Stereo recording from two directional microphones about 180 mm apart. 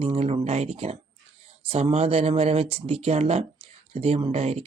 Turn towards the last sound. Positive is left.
turn(degrees=-35)  # may be behind; listen again after turning